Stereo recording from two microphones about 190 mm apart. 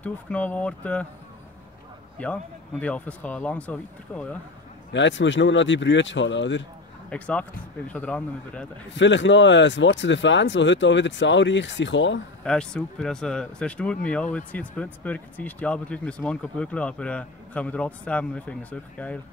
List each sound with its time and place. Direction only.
0.0 s speech: 10° left (ahead or behind)
2.1 s speech: 5° left (ahead or behind)
4.9 s speech: 70° left (ahead or behind)
7.1 s speech: 5° left (ahead or behind)
8.9 s speech: 70° left (ahead or behind)
12.4 s speech: 5° left (ahead or behind)